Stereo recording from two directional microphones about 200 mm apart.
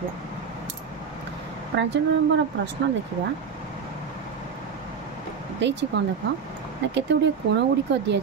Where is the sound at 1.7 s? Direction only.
55° right (ahead or behind).